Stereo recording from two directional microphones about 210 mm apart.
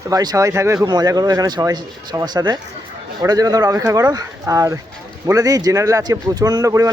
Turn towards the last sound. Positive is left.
turn(degrees=-15)  # may be behind; listen again after turning